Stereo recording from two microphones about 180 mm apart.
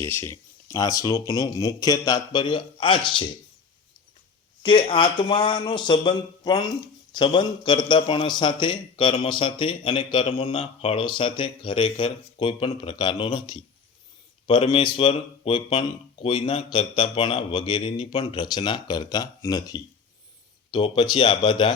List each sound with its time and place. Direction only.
0.0 s speech: 15° left (ahead or behind); by 3.2 s 30° left (ahead or behind)
4.6 s speech: 25° left (ahead or behind)